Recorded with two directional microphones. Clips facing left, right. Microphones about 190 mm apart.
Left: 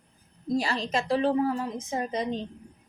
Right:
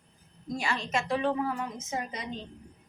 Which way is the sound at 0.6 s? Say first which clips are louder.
Left 2 dB; 35° left (ahead or behind).